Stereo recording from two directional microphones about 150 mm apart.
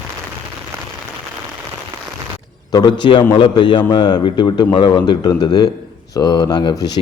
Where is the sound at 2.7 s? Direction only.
30° left (ahead or behind).